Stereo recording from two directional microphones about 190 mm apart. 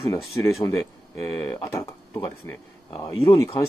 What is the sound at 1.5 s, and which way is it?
Speech, 15° left (ahead or behind).